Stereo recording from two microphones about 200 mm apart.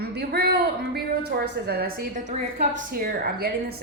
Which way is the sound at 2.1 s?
35° right (ahead or behind).